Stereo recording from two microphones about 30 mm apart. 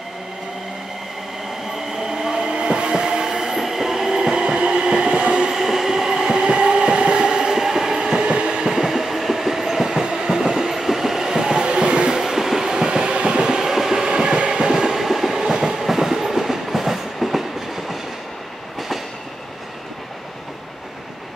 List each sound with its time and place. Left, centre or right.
2.0 s train: right
5.5 s train: centre
7.6 s train: centre; by 8.7 s right
8.7 s train: centre
11.6 s music: right
12.1 s train: centre
12.6 s train: right
13.4 s train: centre
14.0 s train: right
14.9 s train: centre